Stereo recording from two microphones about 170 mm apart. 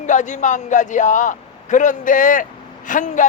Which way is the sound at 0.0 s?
45° left (ahead or behind).